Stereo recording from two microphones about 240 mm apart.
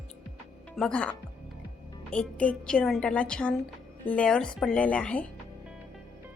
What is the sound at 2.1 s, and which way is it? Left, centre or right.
A woman's voice, centre.